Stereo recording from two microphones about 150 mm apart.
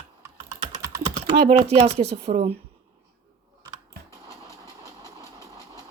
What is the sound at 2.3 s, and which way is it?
Speech, 60° right (ahead or behind).